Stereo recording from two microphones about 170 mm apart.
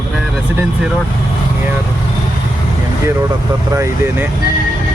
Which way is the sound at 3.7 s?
15° right (ahead or behind).